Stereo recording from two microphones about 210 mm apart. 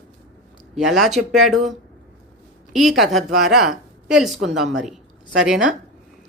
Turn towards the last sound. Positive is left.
turn(degrees=-5)  # may be behind; listen again after turning